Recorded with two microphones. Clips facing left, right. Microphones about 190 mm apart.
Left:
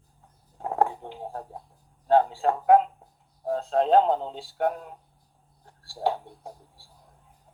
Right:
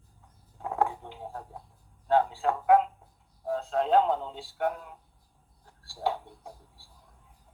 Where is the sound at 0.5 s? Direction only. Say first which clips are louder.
Left 3 dB; 35° left (ahead or behind).